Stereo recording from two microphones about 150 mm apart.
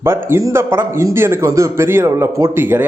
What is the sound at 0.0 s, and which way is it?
A man's voice, 15° right (ahead or behind).